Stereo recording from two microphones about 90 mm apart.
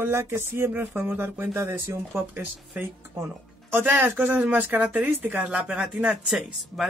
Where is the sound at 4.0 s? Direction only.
15° right (ahead or behind).